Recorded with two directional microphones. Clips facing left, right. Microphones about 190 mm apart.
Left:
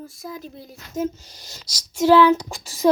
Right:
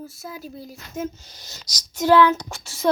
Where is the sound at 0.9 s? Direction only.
35° left (ahead or behind).